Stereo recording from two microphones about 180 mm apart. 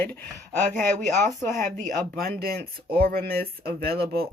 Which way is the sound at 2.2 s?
55° right (ahead or behind).